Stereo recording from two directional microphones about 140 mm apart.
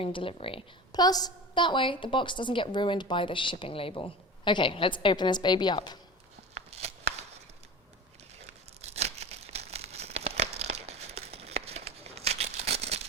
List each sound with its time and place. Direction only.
0.0 s a woman's voice: 40° left (ahead or behind)
6.5 s a sound: 50° right (ahead or behind)
8.8 s tearing: 50° right (ahead or behind)